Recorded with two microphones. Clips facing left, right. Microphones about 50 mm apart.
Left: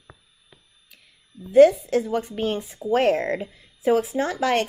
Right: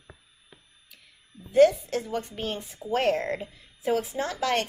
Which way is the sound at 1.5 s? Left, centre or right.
Centre.